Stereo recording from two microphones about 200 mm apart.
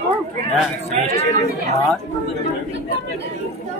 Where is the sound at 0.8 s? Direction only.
30° left (ahead or behind).